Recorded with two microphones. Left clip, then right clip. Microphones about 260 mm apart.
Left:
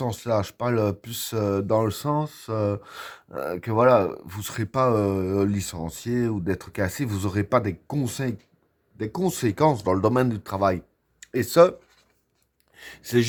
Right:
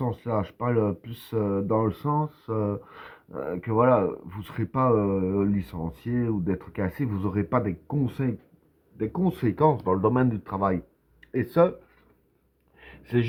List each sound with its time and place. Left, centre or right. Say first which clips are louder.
0.0 s speech: left 3 dB; left
12.7 s speech: left 4 dB; left